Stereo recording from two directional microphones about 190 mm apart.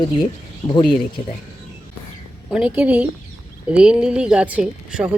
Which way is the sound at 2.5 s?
5° right (ahead or behind).